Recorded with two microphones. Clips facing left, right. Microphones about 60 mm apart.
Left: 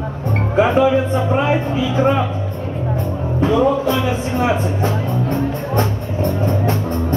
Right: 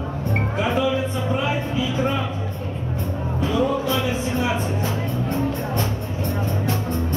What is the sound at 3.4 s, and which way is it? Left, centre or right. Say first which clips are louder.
Speech: left 7 dB; left.